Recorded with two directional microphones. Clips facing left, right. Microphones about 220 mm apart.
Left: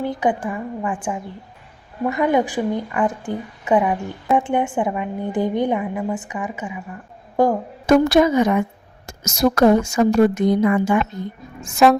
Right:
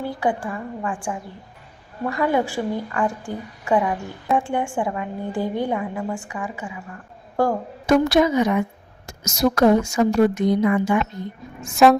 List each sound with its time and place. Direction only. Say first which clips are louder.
0.0 s a woman's voice: left 3 dB; 20° left (ahead or behind)
7.9 s a woman's voice: left 3 dB; 50° left (ahead or behind)
11.8 s speech: even; centre (ahead or behind)